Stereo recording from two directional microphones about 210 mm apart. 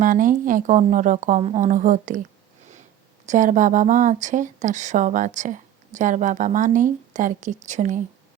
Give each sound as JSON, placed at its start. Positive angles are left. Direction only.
{"t": 0.0, "sound": "speech", "side_deg": -40}
{"t": 3.2, "sound": "speech", "side_deg": -35}